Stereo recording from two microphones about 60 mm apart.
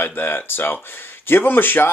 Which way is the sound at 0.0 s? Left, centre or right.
Left.